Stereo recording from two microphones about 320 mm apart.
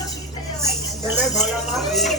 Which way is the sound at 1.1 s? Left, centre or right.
Centre.